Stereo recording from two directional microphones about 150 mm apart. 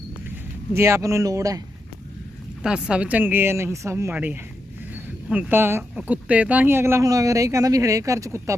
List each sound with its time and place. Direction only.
0.3 s speech: 20° right (ahead or behind)
2.6 s speech: 5° right (ahead or behind)